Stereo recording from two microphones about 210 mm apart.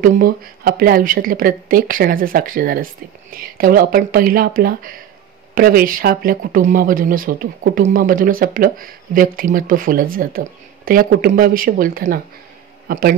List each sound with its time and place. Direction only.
0.0 s speech: 45° right (ahead or behind)